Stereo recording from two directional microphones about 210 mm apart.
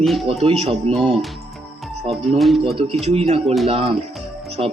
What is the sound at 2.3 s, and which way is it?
Speech, centre (ahead or behind).